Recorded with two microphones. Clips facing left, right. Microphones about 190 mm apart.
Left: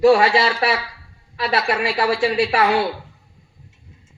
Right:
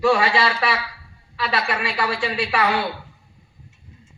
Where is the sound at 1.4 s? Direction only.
45° left (ahead or behind).